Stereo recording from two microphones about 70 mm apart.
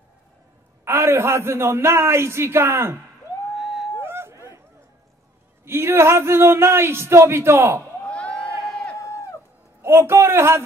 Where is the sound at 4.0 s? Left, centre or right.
Right.